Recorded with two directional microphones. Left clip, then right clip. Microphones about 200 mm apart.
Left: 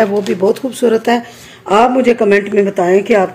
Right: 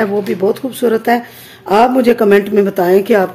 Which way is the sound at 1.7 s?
20° right (ahead or behind).